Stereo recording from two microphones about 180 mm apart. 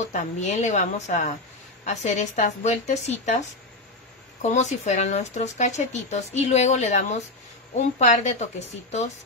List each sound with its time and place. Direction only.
0.0 s speech: 40° left (ahead or behind)